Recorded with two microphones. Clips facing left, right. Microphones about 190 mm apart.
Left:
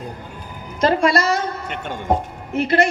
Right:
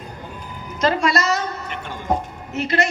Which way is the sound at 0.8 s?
55° left (ahead or behind).